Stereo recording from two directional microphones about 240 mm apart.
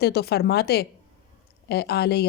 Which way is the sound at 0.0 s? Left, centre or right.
Left.